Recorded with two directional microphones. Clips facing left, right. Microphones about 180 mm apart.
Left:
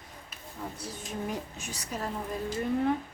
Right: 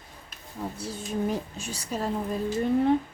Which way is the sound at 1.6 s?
30° right (ahead or behind).